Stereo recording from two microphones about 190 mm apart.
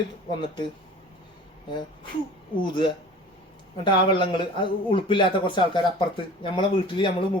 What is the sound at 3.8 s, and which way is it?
A man's voice, 25° left (ahead or behind).